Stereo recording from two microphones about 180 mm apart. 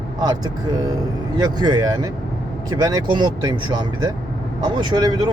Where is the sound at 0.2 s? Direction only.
20° right (ahead or behind).